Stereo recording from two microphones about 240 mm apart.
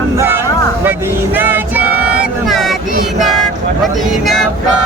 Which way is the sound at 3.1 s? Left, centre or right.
Centre.